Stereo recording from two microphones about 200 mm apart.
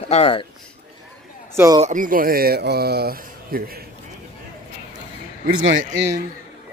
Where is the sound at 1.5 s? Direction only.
15° right (ahead or behind).